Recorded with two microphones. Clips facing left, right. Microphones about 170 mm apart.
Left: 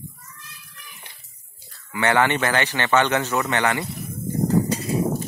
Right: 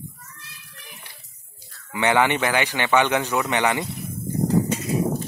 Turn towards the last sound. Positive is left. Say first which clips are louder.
# even
turn(degrees=35)  # may be behind; listen again after turning